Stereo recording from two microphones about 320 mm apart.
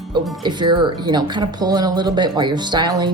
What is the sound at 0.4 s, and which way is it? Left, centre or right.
Speech, centre.